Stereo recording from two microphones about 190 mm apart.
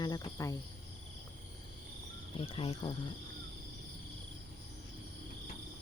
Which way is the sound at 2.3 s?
30° left (ahead or behind).